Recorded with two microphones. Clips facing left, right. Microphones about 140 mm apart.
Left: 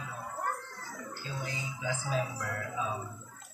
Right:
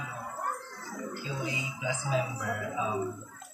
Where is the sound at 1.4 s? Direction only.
15° right (ahead or behind).